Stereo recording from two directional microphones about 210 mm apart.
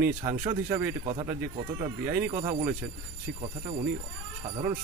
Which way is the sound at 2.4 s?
25° right (ahead or behind).